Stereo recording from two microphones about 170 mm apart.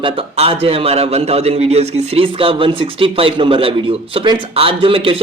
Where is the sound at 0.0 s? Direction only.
30° right (ahead or behind).